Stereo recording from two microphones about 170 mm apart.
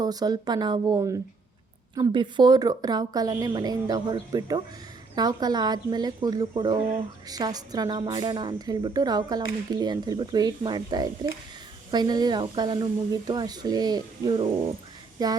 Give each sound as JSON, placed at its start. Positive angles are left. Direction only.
{"t": 0.0, "sound": "a woman's voice", "side_deg": -25}